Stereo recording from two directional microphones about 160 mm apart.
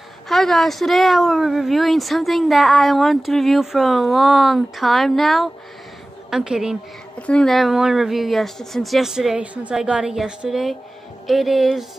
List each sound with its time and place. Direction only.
0.3 s speech: centre (ahead or behind)
7.2 s speech: 5° left (ahead or behind)